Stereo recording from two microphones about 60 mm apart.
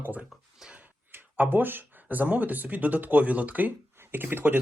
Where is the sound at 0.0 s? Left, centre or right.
Right.